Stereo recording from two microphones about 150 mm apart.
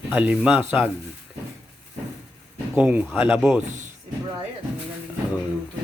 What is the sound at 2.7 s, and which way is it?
Speech, 10° right (ahead or behind).